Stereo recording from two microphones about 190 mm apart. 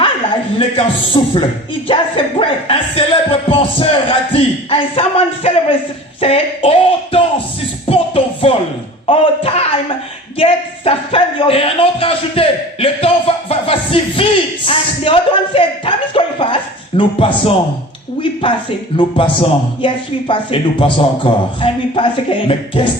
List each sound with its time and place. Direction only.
0.8 s speech: 25° left (ahead or behind)
7.9 s music: 30° left (ahead or behind)
9.0 s a sound: 30° left (ahead or behind)
17.0 s speech: 25° left (ahead or behind)
18.9 s speech: 25° left (ahead or behind)